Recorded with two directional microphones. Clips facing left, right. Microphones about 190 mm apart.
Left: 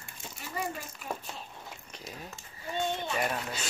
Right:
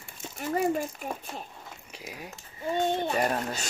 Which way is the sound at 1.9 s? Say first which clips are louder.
Right 4 dB; 10° right (ahead or behind).